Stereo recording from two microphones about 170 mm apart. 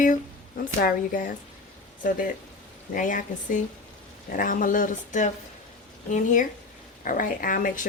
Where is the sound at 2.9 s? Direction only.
50° left (ahead or behind).